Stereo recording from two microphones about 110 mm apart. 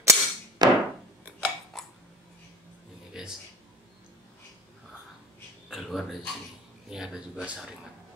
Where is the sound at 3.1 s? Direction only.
5° right (ahead or behind).